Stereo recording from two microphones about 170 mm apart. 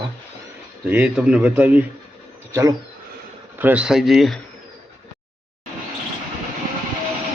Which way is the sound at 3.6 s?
5° right (ahead or behind).